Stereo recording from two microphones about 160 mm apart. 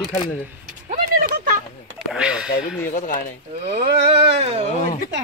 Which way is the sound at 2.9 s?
60° left (ahead or behind).